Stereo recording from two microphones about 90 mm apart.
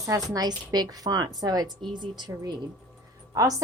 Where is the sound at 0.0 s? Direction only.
40° right (ahead or behind).